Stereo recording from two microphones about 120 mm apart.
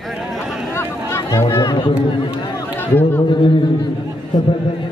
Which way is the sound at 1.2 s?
25° left (ahead or behind).